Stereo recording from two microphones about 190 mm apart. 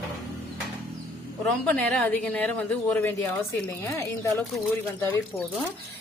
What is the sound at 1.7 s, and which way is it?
A woman's voice, 5° left (ahead or behind).